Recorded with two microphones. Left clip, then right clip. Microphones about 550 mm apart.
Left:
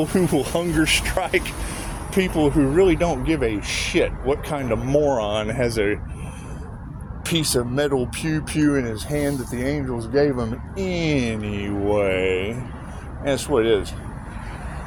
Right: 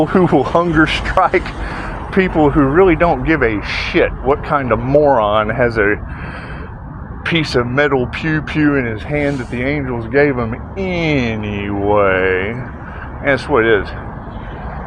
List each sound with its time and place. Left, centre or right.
0.3 s speech: left
7.3 s speech: left